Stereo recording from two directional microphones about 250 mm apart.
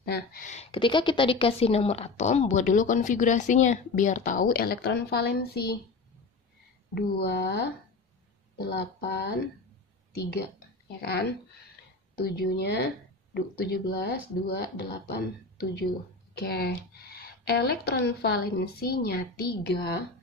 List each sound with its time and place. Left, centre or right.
0.0 s a woman's voice: left
7.0 s speech: left
11.0 s speech: left
16.3 s speech: left